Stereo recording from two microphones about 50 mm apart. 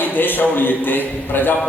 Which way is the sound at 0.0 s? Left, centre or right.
Left.